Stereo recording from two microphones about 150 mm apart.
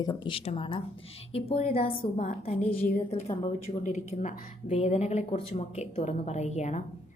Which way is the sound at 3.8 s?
55° left (ahead or behind).